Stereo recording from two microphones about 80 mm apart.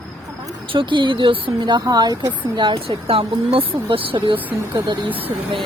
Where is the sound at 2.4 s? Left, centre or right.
Right.